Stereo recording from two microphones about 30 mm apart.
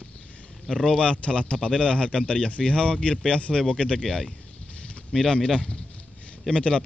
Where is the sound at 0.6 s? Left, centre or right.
Centre.